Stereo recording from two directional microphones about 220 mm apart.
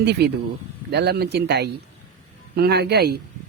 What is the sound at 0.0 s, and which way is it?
Speech, 50° right (ahead or behind).